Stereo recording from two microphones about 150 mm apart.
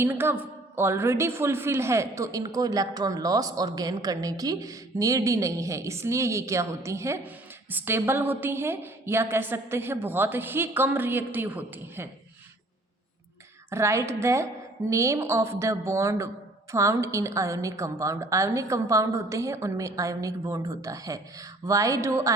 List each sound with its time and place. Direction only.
0.0 s a woman's voice: 15° right (ahead or behind)
13.7 s a woman's voice: 20° right (ahead or behind)